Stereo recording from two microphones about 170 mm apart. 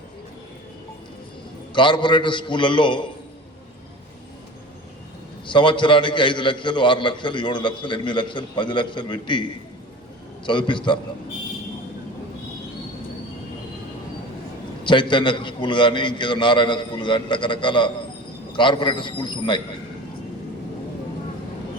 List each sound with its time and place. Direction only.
1.7 s a man's voice: 30° left (ahead or behind)
5.5 s a man's voice: 30° left (ahead or behind)
14.8 s a man's voice: 30° left (ahead or behind)